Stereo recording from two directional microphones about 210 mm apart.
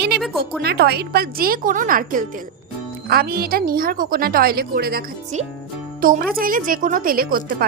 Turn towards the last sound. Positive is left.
turn(degrees=-40)  # may be behind; listen again after turning